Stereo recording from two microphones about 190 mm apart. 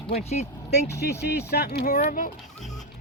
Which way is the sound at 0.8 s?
15° left (ahead or behind).